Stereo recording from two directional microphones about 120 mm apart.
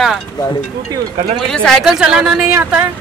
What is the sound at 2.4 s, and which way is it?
Speech, 15° right (ahead or behind).